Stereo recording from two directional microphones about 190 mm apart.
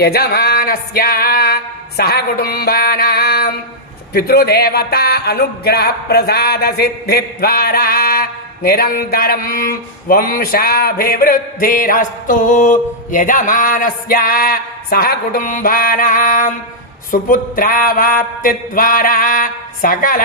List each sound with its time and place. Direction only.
0.0 s music: 55° left (ahead or behind)
4.1 s speech: 55° left (ahead or behind)